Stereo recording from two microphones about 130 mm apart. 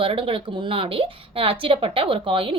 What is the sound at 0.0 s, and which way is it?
Speech, 45° right (ahead or behind).